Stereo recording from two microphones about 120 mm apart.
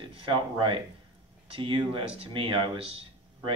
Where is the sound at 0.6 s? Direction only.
40° right (ahead or behind).